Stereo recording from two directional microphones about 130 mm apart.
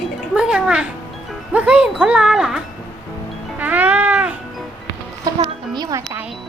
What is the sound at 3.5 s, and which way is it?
Cat, 10° right (ahead or behind).